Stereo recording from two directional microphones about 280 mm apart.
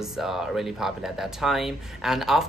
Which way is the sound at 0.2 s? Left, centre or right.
Centre.